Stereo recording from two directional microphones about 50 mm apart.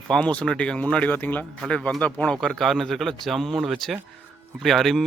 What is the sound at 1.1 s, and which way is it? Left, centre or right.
Speech, left.